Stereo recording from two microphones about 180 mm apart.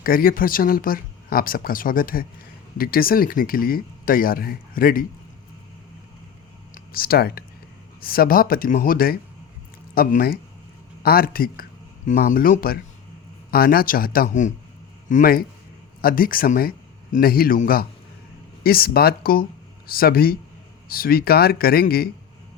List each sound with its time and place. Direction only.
0.0 s speech: 55° left (ahead or behind)
6.7 s a man's voice: 55° left (ahead or behind)